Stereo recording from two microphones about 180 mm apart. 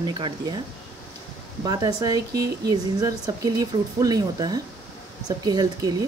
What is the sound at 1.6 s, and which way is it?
Speech, 20° right (ahead or behind).